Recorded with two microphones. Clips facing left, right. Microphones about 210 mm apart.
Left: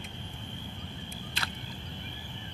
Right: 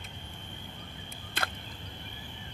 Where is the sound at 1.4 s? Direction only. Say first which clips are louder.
Right 6 dB; 50° right (ahead or behind).